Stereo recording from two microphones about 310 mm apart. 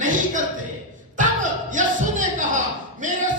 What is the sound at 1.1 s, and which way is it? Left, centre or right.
A man's voice, right.